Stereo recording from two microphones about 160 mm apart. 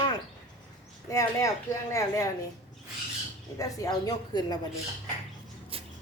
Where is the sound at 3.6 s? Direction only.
25° left (ahead or behind).